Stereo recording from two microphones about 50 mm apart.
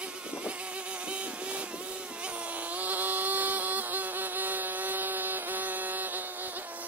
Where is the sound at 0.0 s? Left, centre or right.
Right.